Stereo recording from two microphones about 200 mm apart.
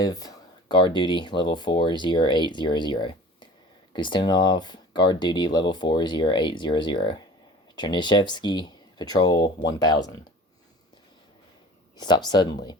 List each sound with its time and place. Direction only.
0.0 s speech: 15° left (ahead or behind)
11.9 s speech: 20° left (ahead or behind)